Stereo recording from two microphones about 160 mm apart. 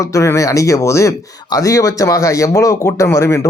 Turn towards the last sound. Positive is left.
turn(degrees=20)  # may be behind; listen again after turning